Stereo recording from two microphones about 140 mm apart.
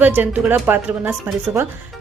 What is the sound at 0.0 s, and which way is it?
A woman's voice, 10° right (ahead or behind).